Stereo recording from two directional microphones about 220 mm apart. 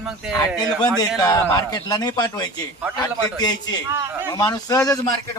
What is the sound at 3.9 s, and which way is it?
Speech, 10° right (ahead or behind).